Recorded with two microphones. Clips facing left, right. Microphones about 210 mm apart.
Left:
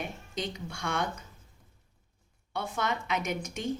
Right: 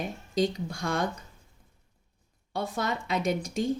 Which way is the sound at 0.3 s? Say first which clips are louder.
Right 10 dB; 35° right (ahead or behind).